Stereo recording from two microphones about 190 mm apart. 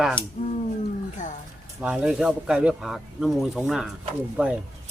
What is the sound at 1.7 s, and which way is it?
Speech, 5° right (ahead or behind).